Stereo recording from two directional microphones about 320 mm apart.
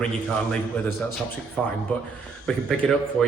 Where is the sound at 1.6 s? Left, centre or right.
Centre.